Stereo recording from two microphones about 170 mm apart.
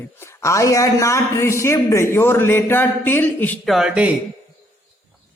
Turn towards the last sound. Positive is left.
turn(degrees=-5)  # may be behind; listen again after turning